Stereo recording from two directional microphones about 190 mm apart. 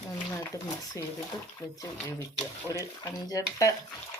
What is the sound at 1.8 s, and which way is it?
Speech, 15° left (ahead or behind).